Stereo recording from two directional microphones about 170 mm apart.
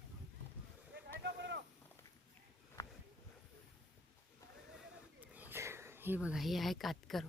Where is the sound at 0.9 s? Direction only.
90° right.